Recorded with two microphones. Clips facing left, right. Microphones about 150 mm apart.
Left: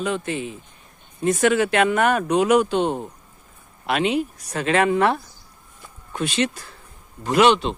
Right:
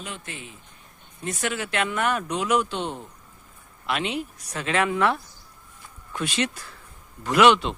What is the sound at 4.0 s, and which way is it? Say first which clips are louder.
Speech: left 11 dB; 5° left (ahead or behind).